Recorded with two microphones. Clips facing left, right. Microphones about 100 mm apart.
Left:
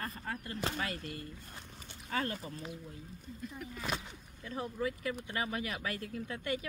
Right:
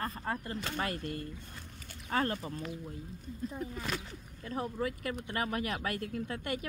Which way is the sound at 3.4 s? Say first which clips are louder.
Right 6 dB; 30° right (ahead or behind).